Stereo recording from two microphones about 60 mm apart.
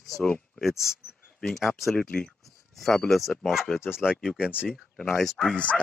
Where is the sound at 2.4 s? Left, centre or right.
Centre.